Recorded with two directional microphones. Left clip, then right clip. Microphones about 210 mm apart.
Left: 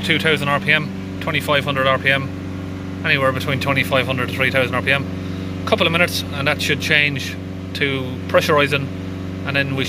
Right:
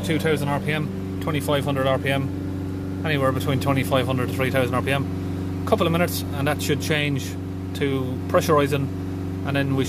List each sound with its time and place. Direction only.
0.0 s speech: 5° right (ahead or behind)
8.4 s speech: 15° right (ahead or behind)